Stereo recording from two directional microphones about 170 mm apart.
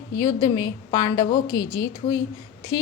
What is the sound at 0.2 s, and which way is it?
A woman's voice, 25° left (ahead or behind).